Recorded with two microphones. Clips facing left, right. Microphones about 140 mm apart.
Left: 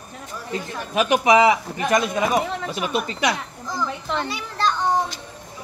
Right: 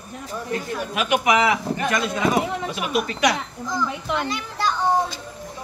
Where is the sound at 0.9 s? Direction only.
30° left (ahead or behind).